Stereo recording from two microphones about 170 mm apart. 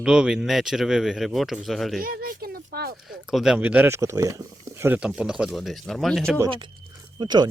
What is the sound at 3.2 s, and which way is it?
Speech, 5° right (ahead or behind).